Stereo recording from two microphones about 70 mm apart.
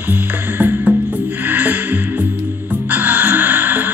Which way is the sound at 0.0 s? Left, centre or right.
Right.